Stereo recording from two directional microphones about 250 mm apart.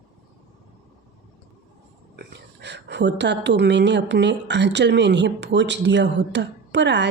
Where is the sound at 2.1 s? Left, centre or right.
Right.